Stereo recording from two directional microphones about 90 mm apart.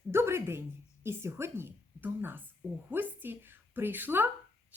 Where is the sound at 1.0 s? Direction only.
30° right (ahead or behind).